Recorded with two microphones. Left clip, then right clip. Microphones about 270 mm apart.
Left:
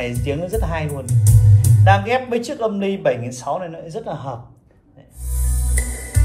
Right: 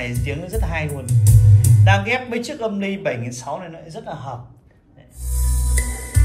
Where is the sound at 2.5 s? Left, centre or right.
Left.